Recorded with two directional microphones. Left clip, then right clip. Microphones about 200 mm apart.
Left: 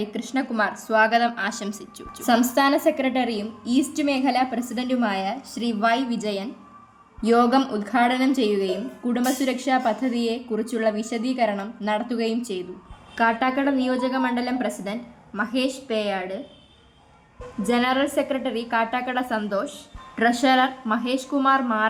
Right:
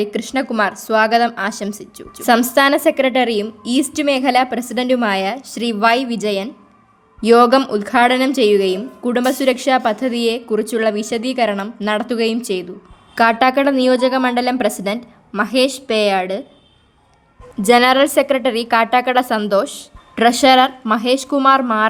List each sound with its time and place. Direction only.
0.0 s a woman's voice: 55° right (ahead or behind)
17.7 s a woman's voice: 60° right (ahead or behind)